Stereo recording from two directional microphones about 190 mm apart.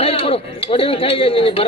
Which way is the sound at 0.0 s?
30° left (ahead or behind).